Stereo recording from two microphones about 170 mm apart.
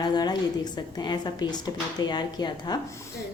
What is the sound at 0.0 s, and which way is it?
A woman's voice, 25° left (ahead or behind).